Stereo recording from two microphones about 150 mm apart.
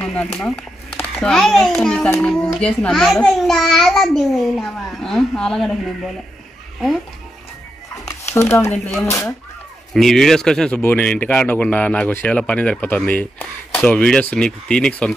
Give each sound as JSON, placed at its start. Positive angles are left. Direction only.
{"t": 0.0, "sound": "a child's voice", "side_deg": 5}
{"t": 8.3, "sound": "speech", "side_deg": 20}
{"t": 9.9, "sound": "a child's voice", "side_deg": 0}